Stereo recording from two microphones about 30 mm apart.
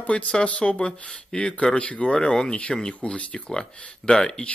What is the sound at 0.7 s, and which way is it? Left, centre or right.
Speech, left.